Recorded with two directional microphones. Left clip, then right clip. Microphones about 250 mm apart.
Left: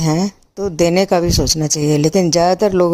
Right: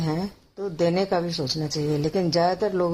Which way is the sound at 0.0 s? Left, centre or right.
Left.